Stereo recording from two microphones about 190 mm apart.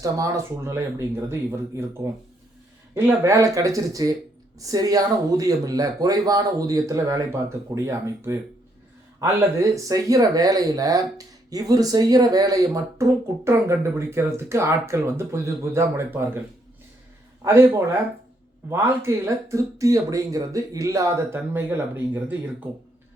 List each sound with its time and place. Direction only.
0.0 s speech: 15° right (ahead or behind)
17.4 s speech: 15° right (ahead or behind)